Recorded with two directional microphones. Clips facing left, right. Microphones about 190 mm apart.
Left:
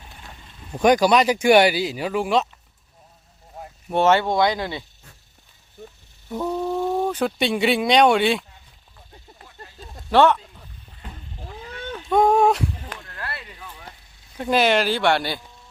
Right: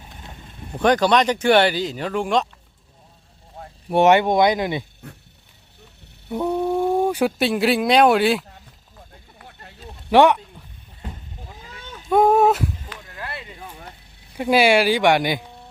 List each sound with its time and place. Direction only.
0.8 s speech: 10° left (ahead or behind)
3.8 s speech: 15° right (ahead or behind)
5.0 s wild animals: 65° right (ahead or behind)
6.2 s speech: 15° right (ahead or behind)
10.1 s speech: 15° right (ahead or behind)
11.7 s a sound: 60° left (ahead or behind)
12.0 s a sound: 5° right (ahead or behind)
13.0 s a sound: 15° right (ahead or behind)
14.3 s speech: 10° right (ahead or behind)
15.4 s music: 60° right (ahead or behind)